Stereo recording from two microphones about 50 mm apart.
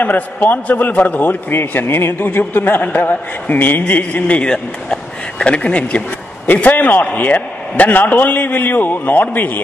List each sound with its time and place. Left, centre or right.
0.0 s a man's voice: left
1.5 s a man's voice: left
3.8 s a sound: left
4.5 s speech: centre
6.4 s a man's voice: left